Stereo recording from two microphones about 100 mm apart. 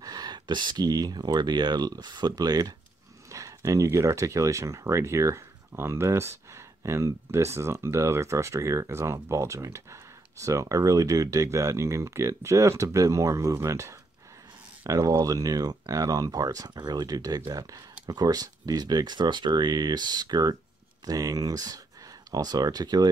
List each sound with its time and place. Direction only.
0.0 s speech: 40° right (ahead or behind)